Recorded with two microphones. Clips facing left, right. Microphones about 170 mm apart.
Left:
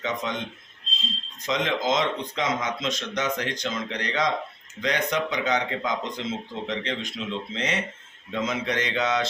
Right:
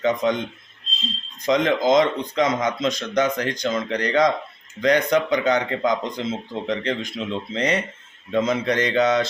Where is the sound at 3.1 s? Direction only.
50° right (ahead or behind).